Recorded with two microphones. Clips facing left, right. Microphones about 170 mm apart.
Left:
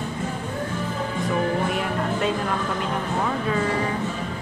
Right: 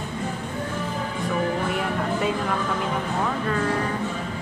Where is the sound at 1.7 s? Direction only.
Centre (ahead or behind).